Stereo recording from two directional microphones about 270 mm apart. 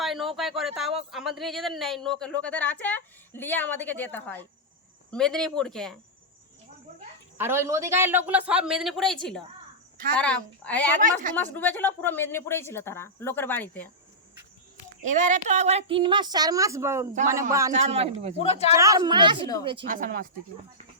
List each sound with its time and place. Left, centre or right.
0.0 s a sound: centre
1.1 s a woman's voice: centre
7.3 s a woman's voice: centre
11.0 s a man's voice: right
11.3 s speech: centre
15.0 s a woman's voice: right; by 17.1 s centre
17.7 s a man's voice: right
18.3 s speech: left
18.7 s a woman's voice: centre
19.8 s speech: right